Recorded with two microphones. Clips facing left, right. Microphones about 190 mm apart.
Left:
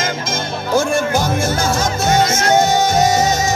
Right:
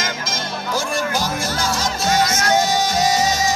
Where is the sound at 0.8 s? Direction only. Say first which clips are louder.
Left 7 dB; 50° left (ahead or behind).